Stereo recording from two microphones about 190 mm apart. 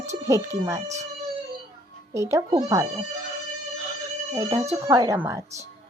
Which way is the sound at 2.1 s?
15° right (ahead or behind).